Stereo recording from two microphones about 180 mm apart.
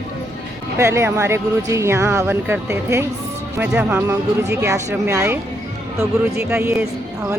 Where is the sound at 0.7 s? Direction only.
15° right (ahead or behind).